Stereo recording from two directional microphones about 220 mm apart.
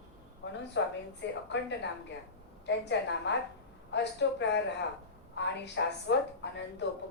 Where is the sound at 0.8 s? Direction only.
55° left (ahead or behind).